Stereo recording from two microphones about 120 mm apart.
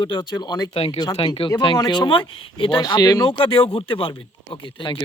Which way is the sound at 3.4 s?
50° left (ahead or behind).